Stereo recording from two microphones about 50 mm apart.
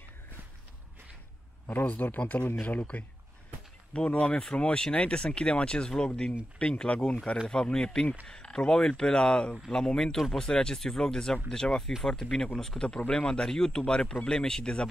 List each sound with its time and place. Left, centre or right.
1.7 s speech: left
3.9 s speech: left
13.0 s speech: left